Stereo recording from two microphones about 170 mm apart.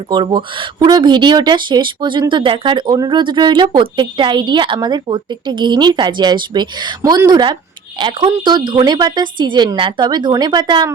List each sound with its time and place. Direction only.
0.1 s speech: 25° right (ahead or behind)